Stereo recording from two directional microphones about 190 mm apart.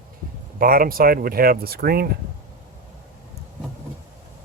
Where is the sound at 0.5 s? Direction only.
50° right (ahead or behind).